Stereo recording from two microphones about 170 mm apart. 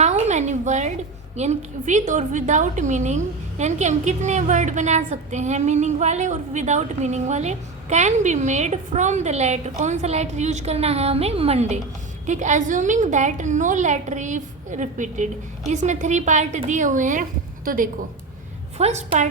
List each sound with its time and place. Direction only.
0.0 s a sound: 40° right (ahead or behind)
1.4 s a woman's voice: 40° right (ahead or behind)
18.8 s a woman's voice: 40° right (ahead or behind)